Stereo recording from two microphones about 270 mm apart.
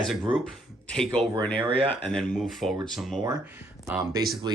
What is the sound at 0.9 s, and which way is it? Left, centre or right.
Speech, centre.